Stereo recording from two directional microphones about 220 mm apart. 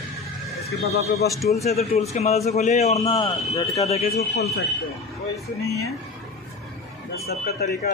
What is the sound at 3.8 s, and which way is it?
Speech, 30° left (ahead or behind).